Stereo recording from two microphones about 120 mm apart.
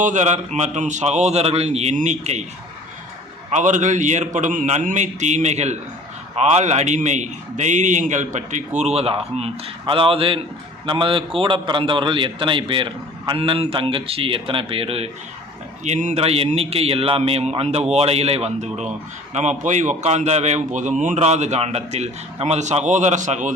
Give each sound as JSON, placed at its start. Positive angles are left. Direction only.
{"t": 0.0, "sound": "a man's voice", "side_deg": -90}
{"t": 3.5, "sound": "a man's voice", "side_deg": -90}
{"t": 15.8, "sound": "a man's voice", "side_deg": -85}
{"t": 16.2, "sound": "a man's voice", "side_deg": -55}